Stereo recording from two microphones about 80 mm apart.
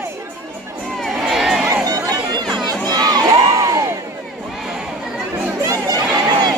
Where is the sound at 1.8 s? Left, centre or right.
Right.